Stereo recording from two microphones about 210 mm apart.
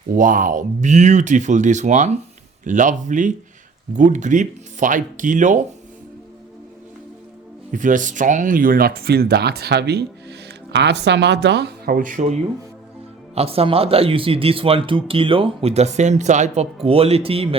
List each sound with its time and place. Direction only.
0.1 s speech: 40° right (ahead or behind)
7.7 s speech: 40° right (ahead or behind)